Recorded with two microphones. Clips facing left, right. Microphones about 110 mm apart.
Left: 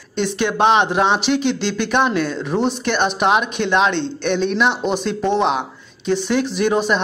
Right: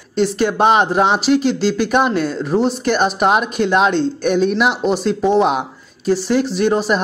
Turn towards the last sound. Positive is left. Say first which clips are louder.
# right 2 dB
turn(degrees=0)  # may be behind; listen again after turning